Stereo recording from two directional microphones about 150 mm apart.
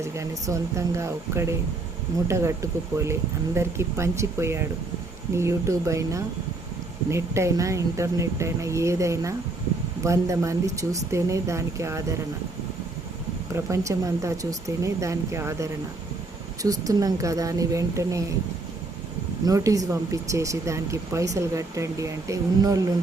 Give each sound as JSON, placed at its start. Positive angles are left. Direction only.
{"t": 0.0, "sound": "speech", "side_deg": -20}
{"t": 13.5, "sound": "speech", "side_deg": -20}
{"t": 19.5, "sound": "speech", "side_deg": -20}